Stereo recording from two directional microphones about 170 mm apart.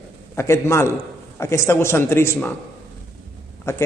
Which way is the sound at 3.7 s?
15° left (ahead or behind).